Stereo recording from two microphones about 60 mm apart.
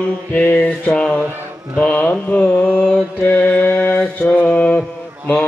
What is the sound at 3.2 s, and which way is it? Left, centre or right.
Mantra, left.